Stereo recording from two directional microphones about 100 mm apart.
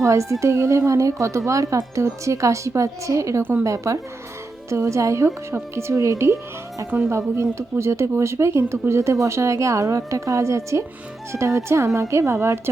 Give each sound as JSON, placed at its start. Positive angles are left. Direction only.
{"t": 0.0, "sound": "a woman's voice", "side_deg": -30}